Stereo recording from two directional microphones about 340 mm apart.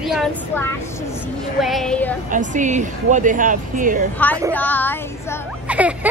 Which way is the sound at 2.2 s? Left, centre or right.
Right.